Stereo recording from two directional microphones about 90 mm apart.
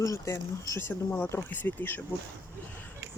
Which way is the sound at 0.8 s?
20° left (ahead or behind).